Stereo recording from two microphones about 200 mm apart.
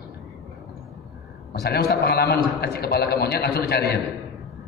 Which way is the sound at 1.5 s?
55° left (ahead or behind).